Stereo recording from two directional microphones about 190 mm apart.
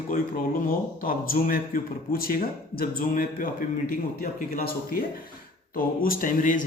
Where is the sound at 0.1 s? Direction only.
45° left (ahead or behind).